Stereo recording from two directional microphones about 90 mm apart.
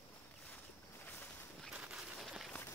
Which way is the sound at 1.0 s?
20° left (ahead or behind).